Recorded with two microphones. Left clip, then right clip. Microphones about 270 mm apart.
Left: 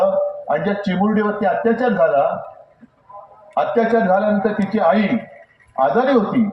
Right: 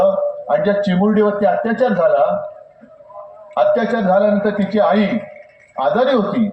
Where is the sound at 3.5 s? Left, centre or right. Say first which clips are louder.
Right 1 dB; right.